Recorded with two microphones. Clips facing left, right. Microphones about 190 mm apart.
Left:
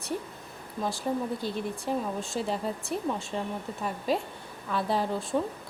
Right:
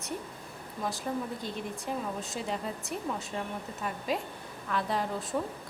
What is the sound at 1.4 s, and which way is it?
A woman's voice, 35° left (ahead or behind).